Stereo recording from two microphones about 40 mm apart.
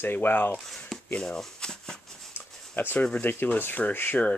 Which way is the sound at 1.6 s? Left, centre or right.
Centre.